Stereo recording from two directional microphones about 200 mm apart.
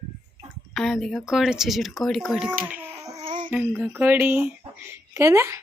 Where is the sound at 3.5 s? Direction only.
10° right (ahead or behind).